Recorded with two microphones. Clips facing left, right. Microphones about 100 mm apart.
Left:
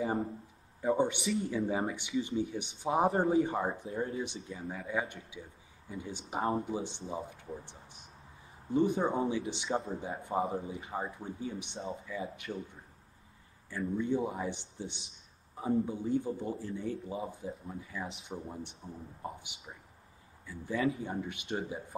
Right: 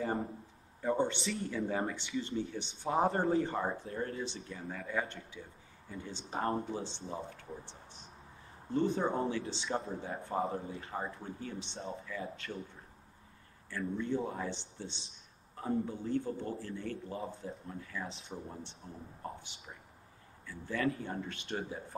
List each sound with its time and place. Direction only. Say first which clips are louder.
0.0 s speech: left 2 dB; 10° left (ahead or behind)
13.7 s speech: left 3 dB; 15° left (ahead or behind)